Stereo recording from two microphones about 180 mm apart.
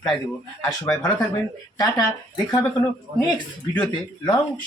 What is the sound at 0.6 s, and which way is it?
Speech, 20° left (ahead or behind).